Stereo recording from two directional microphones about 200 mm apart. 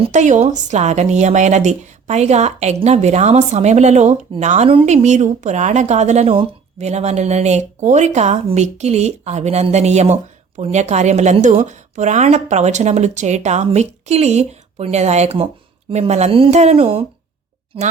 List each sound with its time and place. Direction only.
0.0 s a woman's voice: 35° right (ahead or behind)